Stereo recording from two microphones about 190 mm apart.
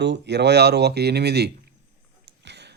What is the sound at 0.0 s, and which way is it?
Speech, 65° right (ahead or behind).